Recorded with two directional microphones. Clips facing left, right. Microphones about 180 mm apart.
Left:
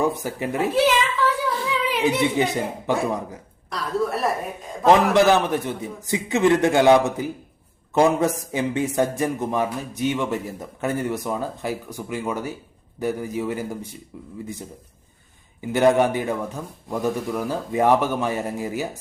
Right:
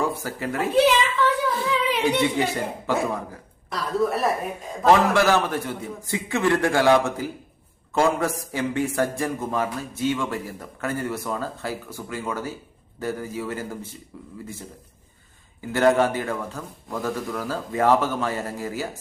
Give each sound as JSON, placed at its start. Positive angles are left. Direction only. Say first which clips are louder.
{"t": 0.0, "sound": "a man's voice", "louder": "left 3 dB", "side_deg": 20}
{"t": 0.7, "sound": "a sound", "louder": "right 3 dB", "side_deg": 0}
{"t": 2.2, "sound": "a man's voice", "louder": "left 2 dB", "side_deg": 20}
{"t": 3.7, "sound": "speech", "louder": "right 1 dB", "side_deg": 0}
{"t": 4.9, "sound": "a man's voice", "louder": "left 2 dB", "side_deg": 20}
{"t": 15.6, "sound": "a man's voice", "louder": "left 2 dB", "side_deg": 15}